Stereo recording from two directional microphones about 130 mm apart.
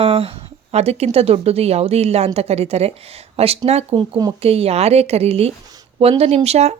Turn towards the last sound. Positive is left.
turn(degrees=-55)  # may be behind; listen again after turning